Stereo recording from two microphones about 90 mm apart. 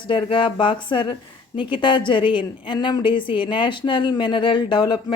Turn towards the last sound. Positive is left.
turn(degrees=60)  # may be behind; listen again after turning